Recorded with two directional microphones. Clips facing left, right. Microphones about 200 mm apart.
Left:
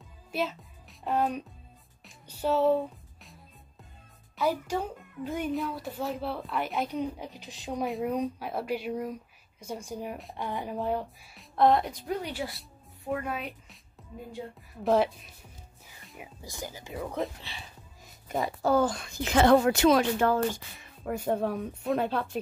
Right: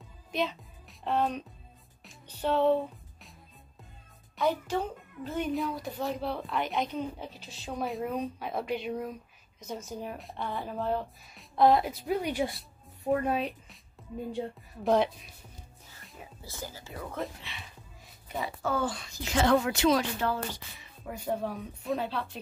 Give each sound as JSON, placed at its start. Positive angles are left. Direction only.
{"t": 0.3, "sound": "music", "side_deg": 5}
{"t": 4.4, "sound": "speech", "side_deg": 10}
{"t": 11.3, "sound": "a woman's voice", "side_deg": 0}
{"t": 13.0, "sound": "a child's voice", "side_deg": -35}
{"t": 14.8, "sound": "speech", "side_deg": 0}
{"t": 16.2, "sound": "speech", "side_deg": 15}
{"t": 17.4, "sound": "speech", "side_deg": 30}
{"t": 19.5, "sound": "speech", "side_deg": 40}